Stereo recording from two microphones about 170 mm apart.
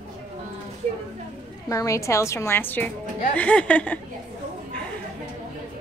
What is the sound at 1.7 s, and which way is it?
A woman's voice, 20° left (ahead or behind).